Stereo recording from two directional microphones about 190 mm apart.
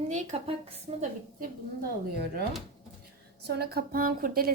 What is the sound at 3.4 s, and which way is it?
A woman's voice, 55° right (ahead or behind).